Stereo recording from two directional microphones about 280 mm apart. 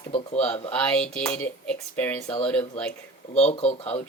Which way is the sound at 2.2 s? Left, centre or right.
Left.